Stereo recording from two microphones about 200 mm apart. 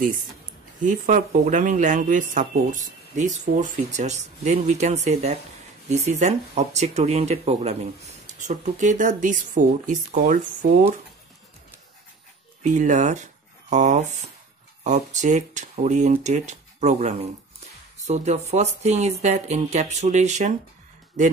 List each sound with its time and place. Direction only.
0.8 s speech: 35° right (ahead or behind)
12.6 s speech: 35° right (ahead or behind)